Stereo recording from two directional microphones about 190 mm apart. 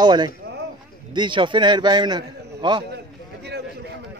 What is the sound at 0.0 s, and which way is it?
A man's voice, 25° right (ahead or behind).